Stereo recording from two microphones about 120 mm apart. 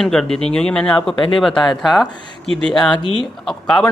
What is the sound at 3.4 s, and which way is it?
Speech, 5° left (ahead or behind).